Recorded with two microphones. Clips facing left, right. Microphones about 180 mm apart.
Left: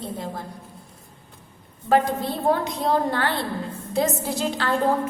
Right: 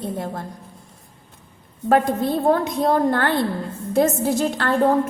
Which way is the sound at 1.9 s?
50° right (ahead or behind).